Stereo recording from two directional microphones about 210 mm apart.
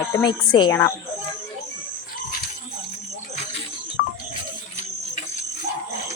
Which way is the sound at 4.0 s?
50° left (ahead or behind).